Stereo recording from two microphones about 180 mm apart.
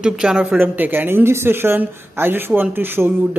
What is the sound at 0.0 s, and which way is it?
A man's voice, 5° right (ahead or behind).